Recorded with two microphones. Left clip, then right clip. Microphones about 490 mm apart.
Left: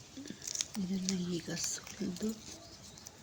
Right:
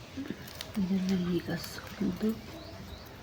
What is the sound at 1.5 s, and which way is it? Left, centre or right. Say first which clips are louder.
Speech: right 3 dB; left.